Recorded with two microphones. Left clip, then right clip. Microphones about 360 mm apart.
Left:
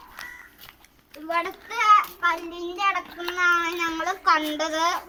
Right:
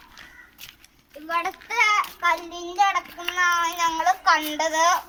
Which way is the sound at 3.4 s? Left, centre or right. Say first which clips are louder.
Even; centre.